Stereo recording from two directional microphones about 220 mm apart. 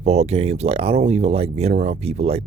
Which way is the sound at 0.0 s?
30° right (ahead or behind).